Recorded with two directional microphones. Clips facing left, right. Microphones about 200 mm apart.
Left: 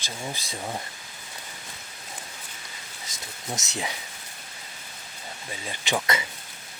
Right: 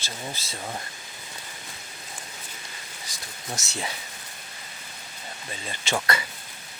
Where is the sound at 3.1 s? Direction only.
20° left (ahead or behind).